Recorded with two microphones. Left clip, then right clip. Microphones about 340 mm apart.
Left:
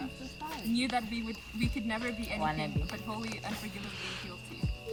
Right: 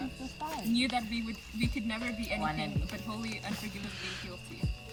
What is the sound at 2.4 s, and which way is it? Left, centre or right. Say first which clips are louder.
Speech: left 1 dB; left.